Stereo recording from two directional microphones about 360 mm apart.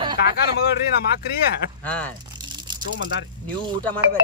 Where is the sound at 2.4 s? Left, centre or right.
Centre.